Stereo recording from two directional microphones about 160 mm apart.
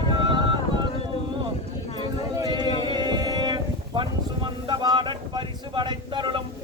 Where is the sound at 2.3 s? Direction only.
25° right (ahead or behind).